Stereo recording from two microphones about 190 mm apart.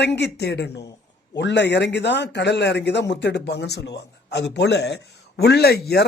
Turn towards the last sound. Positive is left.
turn(degrees=55)  # may be behind; listen again after turning